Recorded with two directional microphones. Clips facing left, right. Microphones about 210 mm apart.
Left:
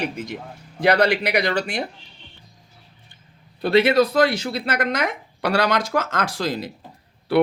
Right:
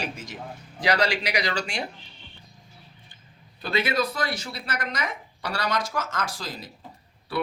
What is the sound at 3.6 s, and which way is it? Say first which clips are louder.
Speech: left 9 dB; 65° left (ahead or behind).